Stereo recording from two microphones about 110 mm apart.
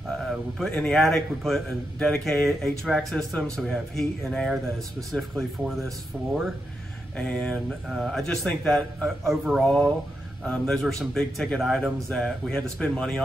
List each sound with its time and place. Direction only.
0.2 s a man's voice: 5° left (ahead or behind)
7.2 s a man's voice: 10° left (ahead or behind)